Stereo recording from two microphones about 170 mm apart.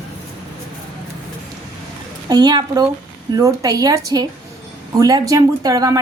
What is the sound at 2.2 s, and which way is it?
Speech, 25° right (ahead or behind).